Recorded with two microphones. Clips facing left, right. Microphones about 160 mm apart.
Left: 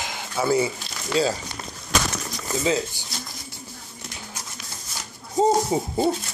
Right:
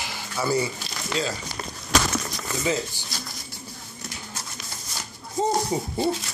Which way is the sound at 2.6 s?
15° left (ahead or behind).